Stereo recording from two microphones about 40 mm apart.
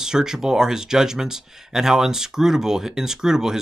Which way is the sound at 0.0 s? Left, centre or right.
Centre.